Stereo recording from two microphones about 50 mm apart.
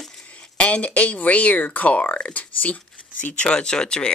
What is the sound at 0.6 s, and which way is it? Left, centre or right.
Speech, left.